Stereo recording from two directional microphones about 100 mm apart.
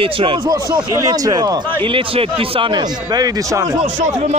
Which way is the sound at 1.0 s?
35° right (ahead or behind).